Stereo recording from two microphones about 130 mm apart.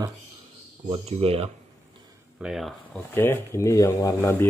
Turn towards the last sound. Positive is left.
turn(degrees=25)  # may be behind; listen again after turning